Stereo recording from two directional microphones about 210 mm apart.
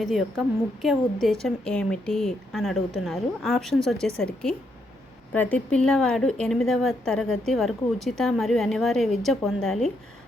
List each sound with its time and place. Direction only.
0.0 s a woman's voice: centre (ahead or behind)